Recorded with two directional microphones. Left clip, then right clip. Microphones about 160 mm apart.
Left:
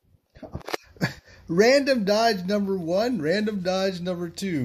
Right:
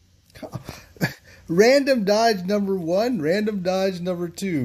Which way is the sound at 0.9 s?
15° right (ahead or behind).